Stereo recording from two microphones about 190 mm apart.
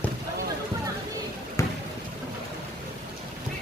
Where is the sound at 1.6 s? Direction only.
15° left (ahead or behind).